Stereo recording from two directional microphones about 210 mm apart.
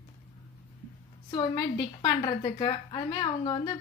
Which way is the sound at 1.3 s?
20° left (ahead or behind).